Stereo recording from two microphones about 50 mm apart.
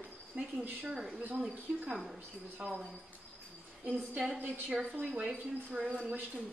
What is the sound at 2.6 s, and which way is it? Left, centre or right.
Speech, centre.